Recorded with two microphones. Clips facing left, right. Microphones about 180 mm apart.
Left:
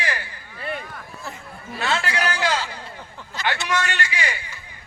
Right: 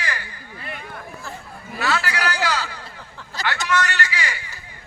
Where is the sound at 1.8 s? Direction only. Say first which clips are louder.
Even; 25° left (ahead or behind).